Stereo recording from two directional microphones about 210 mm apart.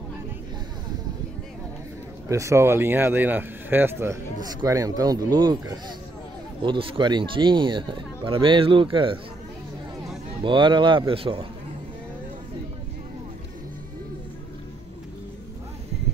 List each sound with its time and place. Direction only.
2.2 s speech: 15° right (ahead or behind)
10.4 s speech: 25° right (ahead or behind)